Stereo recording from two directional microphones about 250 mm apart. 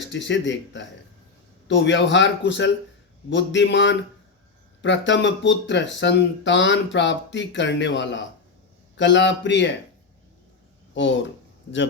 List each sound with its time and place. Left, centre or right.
0.0 s speech: left
10.9 s speech: left